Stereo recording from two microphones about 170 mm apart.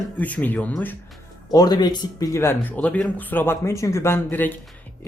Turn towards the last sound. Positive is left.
turn(degrees=10)  # may be behind; listen again after turning